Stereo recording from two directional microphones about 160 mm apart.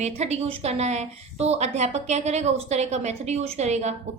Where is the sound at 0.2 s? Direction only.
40° right (ahead or behind).